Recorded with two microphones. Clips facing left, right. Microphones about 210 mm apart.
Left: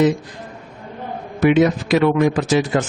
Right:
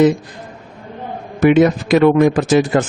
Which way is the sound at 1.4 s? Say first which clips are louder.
Right 3 dB; 50° right (ahead or behind).